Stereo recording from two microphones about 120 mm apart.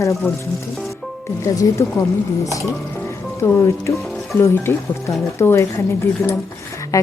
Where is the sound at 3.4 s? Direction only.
20° left (ahead or behind).